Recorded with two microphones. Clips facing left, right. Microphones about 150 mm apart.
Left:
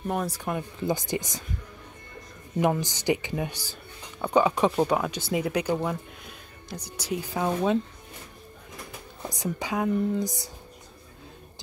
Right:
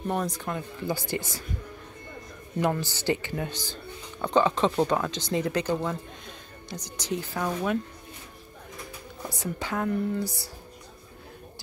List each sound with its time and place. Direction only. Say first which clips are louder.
0.0 s speech: even; 5° left (ahead or behind)
2.6 s speech: left 2 dB; 15° left (ahead or behind)
7.3 s speech: left 4 dB; 25° left (ahead or behind)
9.3 s speech: left 2 dB; 15° left (ahead or behind)